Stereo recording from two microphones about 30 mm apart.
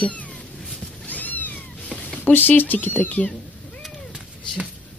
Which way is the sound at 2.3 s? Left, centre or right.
Left.